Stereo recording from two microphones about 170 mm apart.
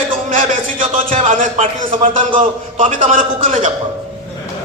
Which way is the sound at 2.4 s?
50° right (ahead or behind).